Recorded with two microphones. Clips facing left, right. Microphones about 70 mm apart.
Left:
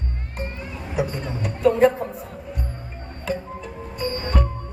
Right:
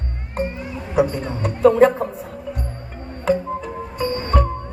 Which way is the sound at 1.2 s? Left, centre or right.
Right.